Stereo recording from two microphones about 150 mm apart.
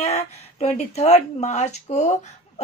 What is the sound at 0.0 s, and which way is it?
Speech, 45° left (ahead or behind).